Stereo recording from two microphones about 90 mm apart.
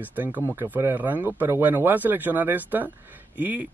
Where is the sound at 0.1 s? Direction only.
20° right (ahead or behind).